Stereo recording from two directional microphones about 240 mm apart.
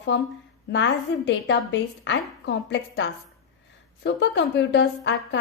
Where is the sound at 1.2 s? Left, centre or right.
Left.